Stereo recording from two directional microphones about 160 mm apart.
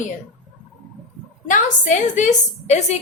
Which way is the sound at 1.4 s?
50° left (ahead or behind).